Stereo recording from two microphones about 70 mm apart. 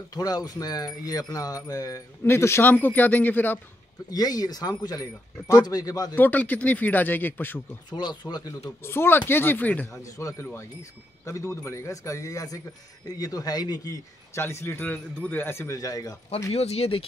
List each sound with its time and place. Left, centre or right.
0.1 s wind chime: left
2.2 s speech: left
2.7 s speech: left
4.1 s speech: left
6.1 s speech: left
7.9 s speech: left
8.8 s speech: left
10.0 s speech: left
10.4 s speech: left
10.8 s speech: left
14.3 s speech: left
14.8 s speech: left
15.8 s wind chime: left